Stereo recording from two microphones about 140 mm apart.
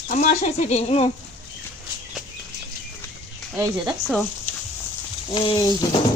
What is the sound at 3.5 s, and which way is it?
Speech, 25° right (ahead or behind).